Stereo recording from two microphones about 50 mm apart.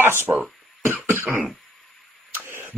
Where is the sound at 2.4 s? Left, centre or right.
Right.